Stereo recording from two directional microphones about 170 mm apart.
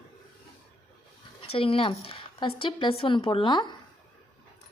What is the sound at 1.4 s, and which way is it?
Speech, 35° left (ahead or behind).